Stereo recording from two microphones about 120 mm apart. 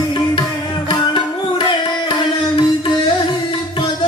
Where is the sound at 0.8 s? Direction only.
45° left (ahead or behind).